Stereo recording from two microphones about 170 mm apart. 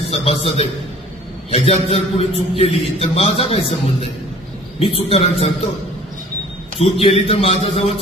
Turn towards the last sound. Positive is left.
turn(degrees=35)  # may be behind; listen again after turning